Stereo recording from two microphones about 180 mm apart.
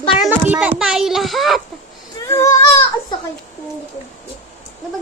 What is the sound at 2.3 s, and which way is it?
Speech, 15° left (ahead or behind).